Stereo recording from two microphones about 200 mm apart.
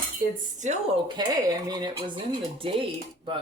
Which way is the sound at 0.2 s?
40° right (ahead or behind).